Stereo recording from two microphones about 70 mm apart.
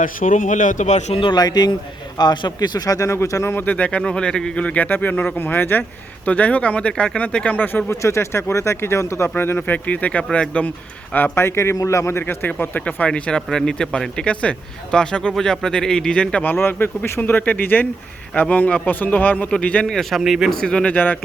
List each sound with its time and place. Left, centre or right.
1.3 s speech: left
2.1 s speech: left
3.5 s a man's voice: left
6.2 s a man's voice: left
7.9 s speech: left
9.3 s a man's voice: left
11.1 s a man's voice: left
12.2 s a man's voice: left
19.9 s speech: centre; by 21.2 s left